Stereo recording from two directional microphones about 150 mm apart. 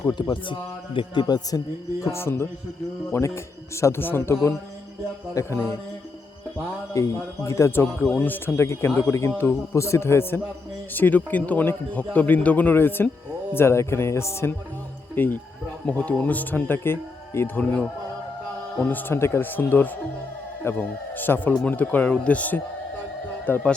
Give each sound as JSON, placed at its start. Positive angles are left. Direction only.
{"t": 0.0, "sound": "a man's voice", "side_deg": 25}
{"t": 2.0, "sound": "a man's voice", "side_deg": 15}
{"t": 6.9, "sound": "a man's voice", "side_deg": 20}